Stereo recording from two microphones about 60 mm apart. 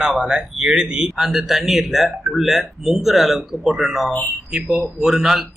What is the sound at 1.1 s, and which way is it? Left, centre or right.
Speech, centre.